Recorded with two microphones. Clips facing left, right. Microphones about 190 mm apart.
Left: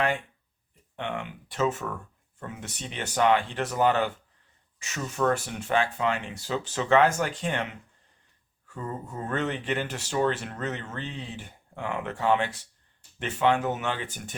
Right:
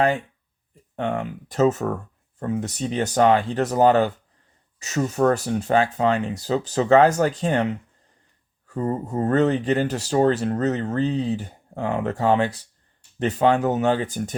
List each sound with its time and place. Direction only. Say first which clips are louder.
0.9 s speech: right 8 dB; 40° right (ahead or behind)